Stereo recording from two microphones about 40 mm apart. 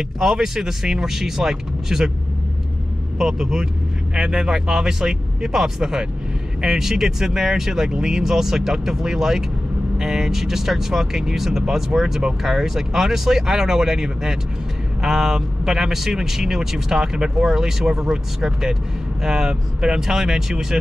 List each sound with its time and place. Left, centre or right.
0.2 s speech: centre
3.2 s speech: centre